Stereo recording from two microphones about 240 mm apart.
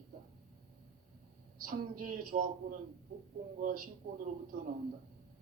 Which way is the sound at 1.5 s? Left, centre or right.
Right.